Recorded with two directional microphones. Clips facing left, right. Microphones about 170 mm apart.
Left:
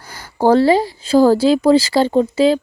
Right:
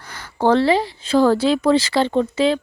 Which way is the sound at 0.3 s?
40° left (ahead or behind).